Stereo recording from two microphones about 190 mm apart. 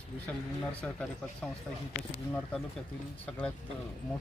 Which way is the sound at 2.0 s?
25° left (ahead or behind).